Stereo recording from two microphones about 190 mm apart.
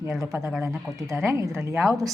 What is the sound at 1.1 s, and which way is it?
Speech, 15° right (ahead or behind).